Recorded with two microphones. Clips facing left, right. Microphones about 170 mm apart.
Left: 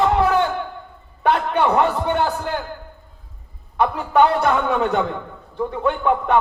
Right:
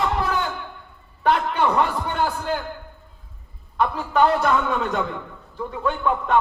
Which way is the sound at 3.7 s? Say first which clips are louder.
Left 3 dB; 65° left (ahead or behind).